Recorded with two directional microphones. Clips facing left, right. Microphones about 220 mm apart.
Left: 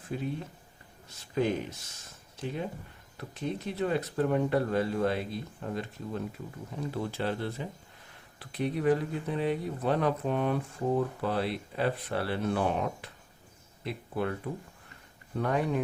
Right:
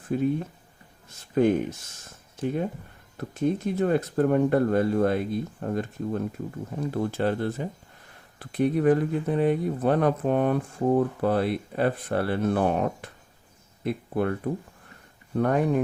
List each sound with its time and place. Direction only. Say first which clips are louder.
0.1 s speech: right 9 dB; 50° right (ahead or behind)
2.0 s a sound: right 8 dB; 50° right (ahead or behind)
3.2 s speech: right 9 dB; 50° right (ahead or behind)